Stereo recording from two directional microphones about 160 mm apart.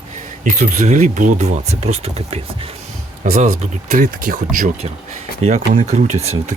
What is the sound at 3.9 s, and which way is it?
Speech, 55° right (ahead or behind).